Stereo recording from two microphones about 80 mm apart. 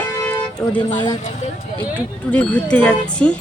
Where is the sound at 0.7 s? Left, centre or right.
Left.